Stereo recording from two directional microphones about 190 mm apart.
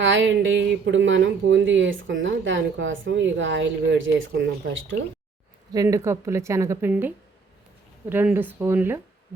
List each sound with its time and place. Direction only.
0.0 s speech: 75° right (ahead or behind)
5.7 s a woman's voice: 20° right (ahead or behind)
8.1 s a woman's voice: 10° right (ahead or behind)